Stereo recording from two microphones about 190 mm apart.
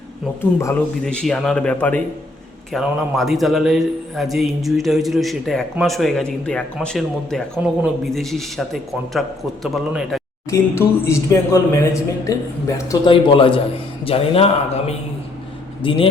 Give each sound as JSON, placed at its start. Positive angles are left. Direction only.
{"t": 1.0, "sound": "a man's voice", "side_deg": 5}
{"t": 10.5, "sound": "a man's voice", "side_deg": 15}